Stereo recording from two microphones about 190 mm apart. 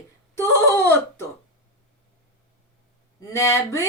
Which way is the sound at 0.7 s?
15° left (ahead or behind).